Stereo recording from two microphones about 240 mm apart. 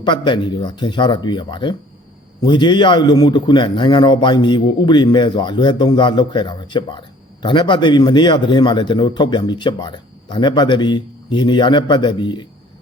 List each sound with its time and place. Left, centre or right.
0.0 s a man's voice: centre